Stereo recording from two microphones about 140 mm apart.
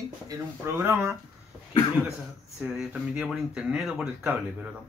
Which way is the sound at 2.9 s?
10° right (ahead or behind).